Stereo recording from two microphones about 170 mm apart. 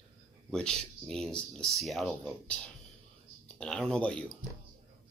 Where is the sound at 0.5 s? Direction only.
5° left (ahead or behind).